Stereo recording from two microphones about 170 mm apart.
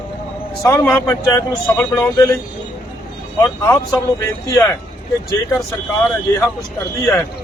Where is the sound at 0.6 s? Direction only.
15° left (ahead or behind).